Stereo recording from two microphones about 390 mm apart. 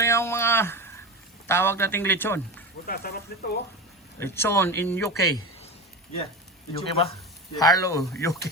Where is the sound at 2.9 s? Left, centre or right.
Left.